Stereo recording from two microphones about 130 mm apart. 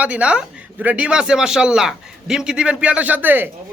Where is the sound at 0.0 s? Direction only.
10° right (ahead or behind).